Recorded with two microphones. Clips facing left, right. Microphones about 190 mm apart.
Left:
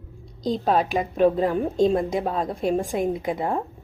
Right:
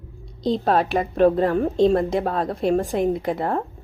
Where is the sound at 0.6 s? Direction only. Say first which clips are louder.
Even; 15° left (ahead or behind).